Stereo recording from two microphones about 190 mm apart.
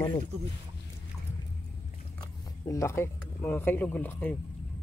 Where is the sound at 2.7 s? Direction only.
15° left (ahead or behind).